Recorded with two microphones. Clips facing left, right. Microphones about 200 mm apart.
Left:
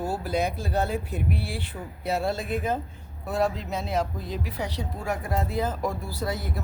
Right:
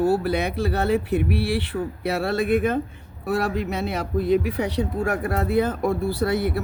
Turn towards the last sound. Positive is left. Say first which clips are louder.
# right 9 dB
turn(degrees=-65)  # may be behind; listen again after turning